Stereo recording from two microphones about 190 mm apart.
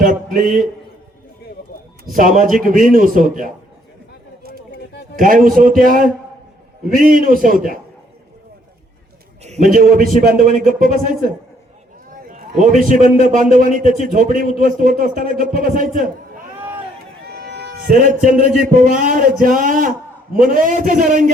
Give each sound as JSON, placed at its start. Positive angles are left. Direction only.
{"t": 0.0, "sound": "a man's voice", "side_deg": -45}
{"t": 2.4, "sound": "a man's voice", "side_deg": -45}
{"t": 5.1, "sound": "a man's voice", "side_deg": -45}
{"t": 9.4, "sound": "a man's voice", "side_deg": -40}
{"t": 12.8, "sound": "a man's voice", "side_deg": -45}
{"t": 16.6, "sound": "run", "side_deg": -10}
{"t": 17.2, "sound": "a man's voice", "side_deg": -60}